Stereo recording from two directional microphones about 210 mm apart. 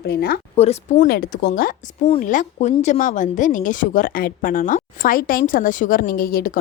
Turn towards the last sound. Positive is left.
turn(degrees=45)  # may be behind; listen again after turning